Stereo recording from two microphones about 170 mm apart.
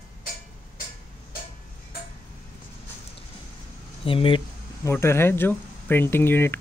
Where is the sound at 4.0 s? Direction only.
30° left (ahead or behind).